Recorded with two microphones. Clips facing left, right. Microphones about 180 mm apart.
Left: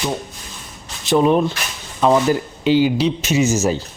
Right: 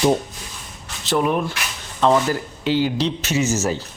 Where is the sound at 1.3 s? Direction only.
25° left (ahead or behind).